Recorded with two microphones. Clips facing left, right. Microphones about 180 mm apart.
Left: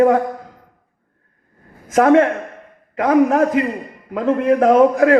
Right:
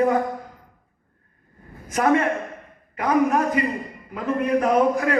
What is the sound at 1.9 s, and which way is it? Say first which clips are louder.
A man's voice: left 7 dB; 90° left.